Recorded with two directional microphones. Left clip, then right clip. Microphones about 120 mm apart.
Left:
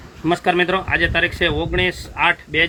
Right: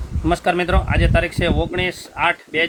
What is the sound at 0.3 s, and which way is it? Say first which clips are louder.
Speech: left 1 dB; 30° right (ahead or behind).